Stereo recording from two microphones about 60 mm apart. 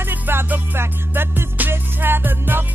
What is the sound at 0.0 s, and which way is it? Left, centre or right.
Music, right.